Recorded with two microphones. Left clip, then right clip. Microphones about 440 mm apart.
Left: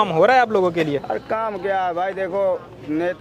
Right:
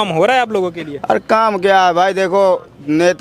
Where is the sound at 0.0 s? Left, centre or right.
Centre.